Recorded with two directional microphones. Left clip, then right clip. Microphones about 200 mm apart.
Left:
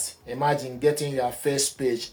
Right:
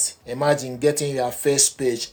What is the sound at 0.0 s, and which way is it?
Speech, 45° right (ahead or behind).